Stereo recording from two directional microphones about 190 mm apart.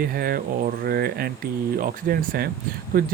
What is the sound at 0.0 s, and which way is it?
Speech, 50° right (ahead or behind).